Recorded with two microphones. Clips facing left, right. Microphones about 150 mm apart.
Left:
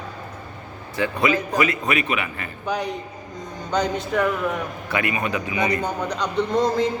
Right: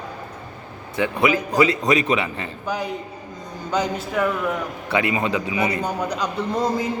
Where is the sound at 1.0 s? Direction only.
20° right (ahead or behind).